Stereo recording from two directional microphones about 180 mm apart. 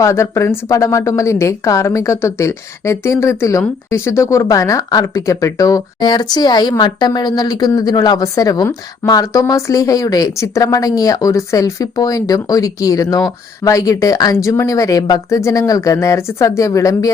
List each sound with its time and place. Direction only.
0.0 s a woman's voice: 15° left (ahead or behind)